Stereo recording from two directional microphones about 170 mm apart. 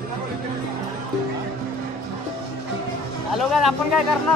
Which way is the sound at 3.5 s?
Centre (ahead or behind).